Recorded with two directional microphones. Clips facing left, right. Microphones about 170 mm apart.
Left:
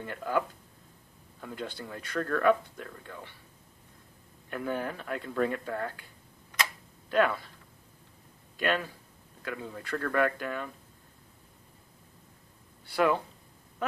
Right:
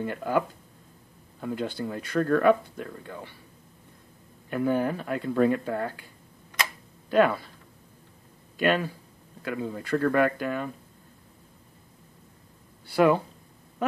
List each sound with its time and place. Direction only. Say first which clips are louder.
0.0 s speech: right 5 dB; 15° right (ahead or behind)
1.5 s speech: right 8 dB; 10° right (ahead or behind)
4.5 s speech: right 8 dB; 15° right (ahead or behind)
7.1 s speech: right 5 dB; 10° right (ahead or behind)
8.5 s speech: right 5 dB; 10° right (ahead or behind)
12.9 s speech: right 5 dB; 10° right (ahead or behind)